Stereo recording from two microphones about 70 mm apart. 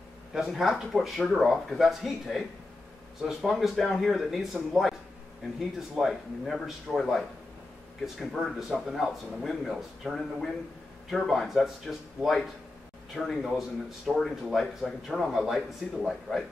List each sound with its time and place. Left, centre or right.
0.3 s a man's voice: centre